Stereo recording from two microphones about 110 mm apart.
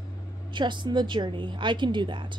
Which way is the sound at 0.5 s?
45° right (ahead or behind).